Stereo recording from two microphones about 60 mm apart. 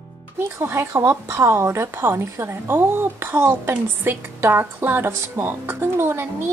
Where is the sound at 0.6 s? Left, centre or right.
Right.